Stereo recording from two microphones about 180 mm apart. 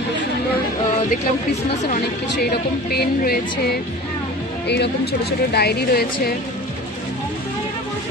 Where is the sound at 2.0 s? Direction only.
70° left (ahead or behind).